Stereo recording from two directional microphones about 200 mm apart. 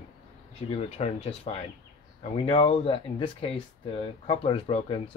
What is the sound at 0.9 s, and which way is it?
Speech, 30° left (ahead or behind).